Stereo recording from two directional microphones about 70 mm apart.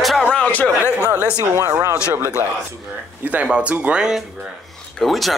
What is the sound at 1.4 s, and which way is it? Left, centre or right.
Speech, right.